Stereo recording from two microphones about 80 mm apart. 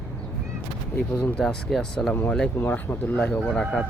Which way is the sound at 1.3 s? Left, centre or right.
Centre.